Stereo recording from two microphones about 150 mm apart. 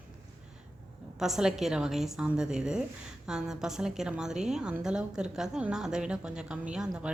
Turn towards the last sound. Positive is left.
turn(degrees=-5)  # may be behind; listen again after turning